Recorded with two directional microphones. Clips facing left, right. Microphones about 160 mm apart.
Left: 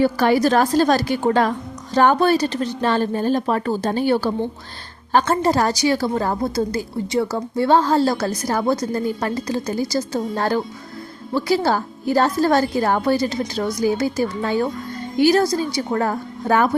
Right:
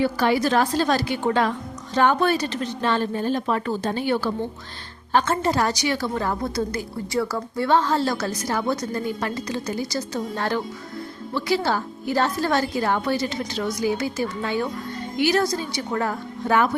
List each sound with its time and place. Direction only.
0.0 s a woman's voice: 45° left (ahead or behind)